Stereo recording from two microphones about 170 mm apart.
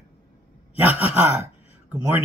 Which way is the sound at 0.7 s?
10° right (ahead or behind).